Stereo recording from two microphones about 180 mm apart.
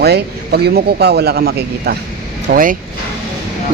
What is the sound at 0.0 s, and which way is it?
Speech, 65° right (ahead or behind).